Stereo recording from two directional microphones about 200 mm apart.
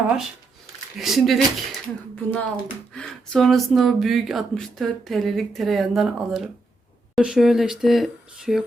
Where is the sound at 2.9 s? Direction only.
5° left (ahead or behind).